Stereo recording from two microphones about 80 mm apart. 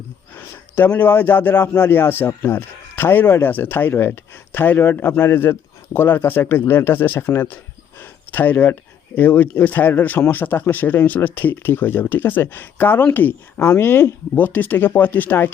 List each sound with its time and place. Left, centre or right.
0.3 s speech: left